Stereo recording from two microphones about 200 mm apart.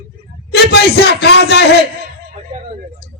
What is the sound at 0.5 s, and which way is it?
Speech, 55° left (ahead or behind).